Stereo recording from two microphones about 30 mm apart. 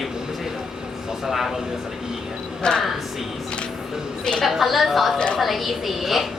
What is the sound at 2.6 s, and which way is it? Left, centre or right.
Speech, left.